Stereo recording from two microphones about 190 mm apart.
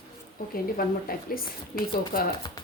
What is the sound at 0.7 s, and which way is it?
Speech, 50° left (ahead or behind).